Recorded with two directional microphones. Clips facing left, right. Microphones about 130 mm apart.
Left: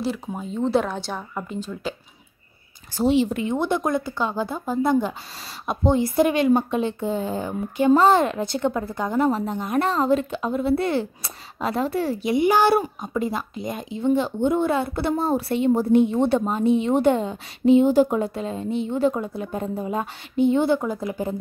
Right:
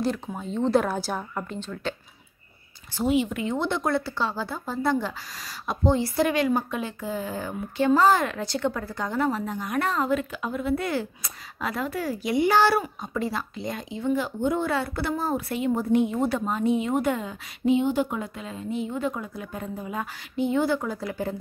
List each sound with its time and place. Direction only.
0.0 s speech: 5° left (ahead or behind)
3.0 s speech: 35° left (ahead or behind)
3.5 s speech: 15° left (ahead or behind)